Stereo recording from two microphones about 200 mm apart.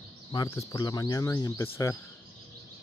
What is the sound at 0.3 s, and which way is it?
Speech, 20° left (ahead or behind).